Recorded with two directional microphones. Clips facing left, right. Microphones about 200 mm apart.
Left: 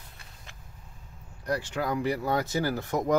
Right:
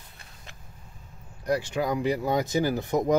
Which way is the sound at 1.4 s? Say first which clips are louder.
Right 4 dB; 10° right (ahead or behind).